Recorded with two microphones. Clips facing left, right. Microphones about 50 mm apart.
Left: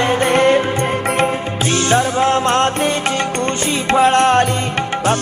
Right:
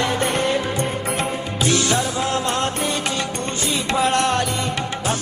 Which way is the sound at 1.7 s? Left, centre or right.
Left.